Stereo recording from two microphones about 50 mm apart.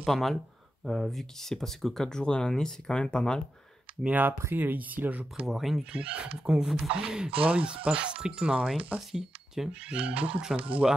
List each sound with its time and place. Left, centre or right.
0.0 s speech: centre
4.1 s speech: right
5.5 s speech: centre
5.9 s speech: right
9.1 s speech: centre
9.9 s speech: right